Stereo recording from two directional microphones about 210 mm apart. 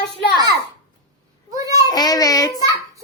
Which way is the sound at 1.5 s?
15° right (ahead or behind).